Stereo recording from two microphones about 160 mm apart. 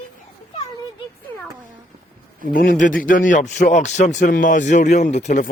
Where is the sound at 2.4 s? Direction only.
60° left (ahead or behind).